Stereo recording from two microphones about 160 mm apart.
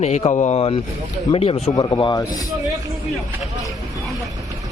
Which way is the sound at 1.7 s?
25° left (ahead or behind).